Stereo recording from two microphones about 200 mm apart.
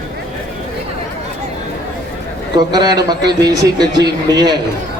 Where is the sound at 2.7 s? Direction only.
20° right (ahead or behind).